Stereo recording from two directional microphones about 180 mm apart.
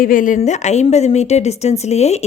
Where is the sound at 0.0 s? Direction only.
50° left (ahead or behind).